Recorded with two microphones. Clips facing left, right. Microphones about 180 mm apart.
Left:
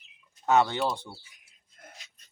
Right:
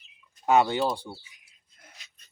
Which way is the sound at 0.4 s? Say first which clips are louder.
Right 2 dB; 10° right (ahead or behind).